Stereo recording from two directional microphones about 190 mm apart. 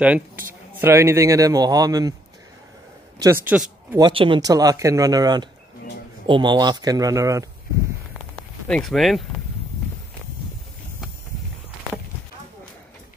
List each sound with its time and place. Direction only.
0.7 s speech: 15° right (ahead or behind)
3.2 s speech: 10° right (ahead or behind)
3.9 s speech: 25° right (ahead or behind)
8.4 s speech: 5° left (ahead or behind)